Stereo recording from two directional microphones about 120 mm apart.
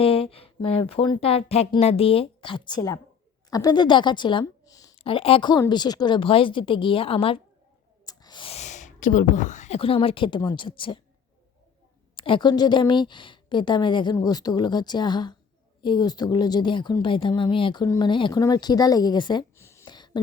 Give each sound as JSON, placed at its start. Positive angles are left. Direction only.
{"t": 0.0, "sound": "a woman's voice", "side_deg": 50}
{"t": 4.6, "sound": "a sound", "side_deg": 30}
{"t": 5.0, "sound": "a woman's voice", "side_deg": 50}
{"t": 5.5, "sound": "a woman's voice", "side_deg": 35}
{"t": 8.0, "sound": "snake", "side_deg": 35}
{"t": 8.4, "sound": "a woman's voice", "side_deg": 70}
{"t": 12.1, "sound": "speech", "side_deg": 45}
{"t": 19.5, "sound": "a sound", "side_deg": 20}